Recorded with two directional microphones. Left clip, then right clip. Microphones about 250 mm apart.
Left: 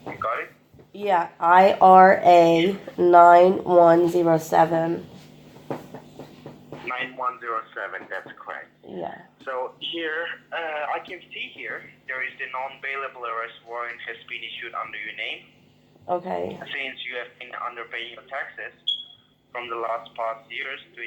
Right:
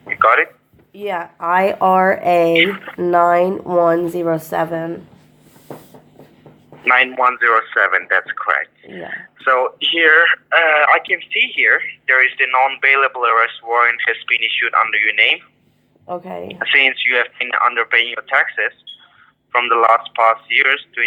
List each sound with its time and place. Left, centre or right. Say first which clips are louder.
0.9 s speech: left 1 dB; right
6.8 s speech: right 15 dB; right
8.9 s speech: right 3 dB; right
9.4 s speech: right 15 dB; right
16.0 s speech: even; right
16.6 s speech: right 18 dB; right
19.5 s speech: right 16 dB; right